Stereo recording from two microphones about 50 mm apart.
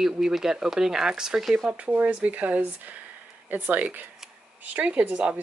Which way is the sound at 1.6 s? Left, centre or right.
Right.